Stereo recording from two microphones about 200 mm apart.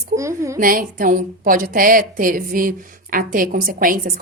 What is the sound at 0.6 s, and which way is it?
A woman's voice, 45° right (ahead or behind).